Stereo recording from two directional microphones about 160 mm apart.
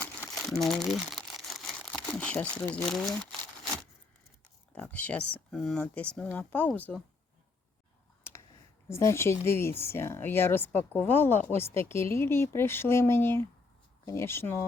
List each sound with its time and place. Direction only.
0.0 s crumpling: 5° left (ahead or behind)
0.6 s speech: centre (ahead or behind)
4.7 s speech: 10° left (ahead or behind)
8.9 s speech: 15° left (ahead or behind)